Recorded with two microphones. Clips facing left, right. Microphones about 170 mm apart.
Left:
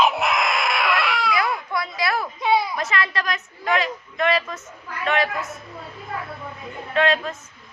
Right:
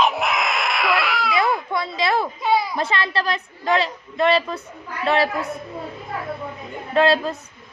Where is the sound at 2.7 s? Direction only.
30° right (ahead or behind).